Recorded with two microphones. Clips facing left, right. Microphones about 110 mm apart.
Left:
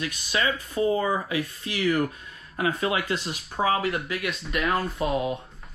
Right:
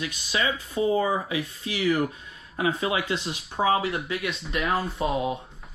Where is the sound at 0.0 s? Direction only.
40° left (ahead or behind).